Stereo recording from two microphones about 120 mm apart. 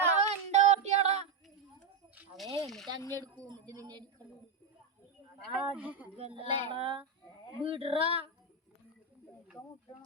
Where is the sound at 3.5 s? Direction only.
35° right (ahead or behind).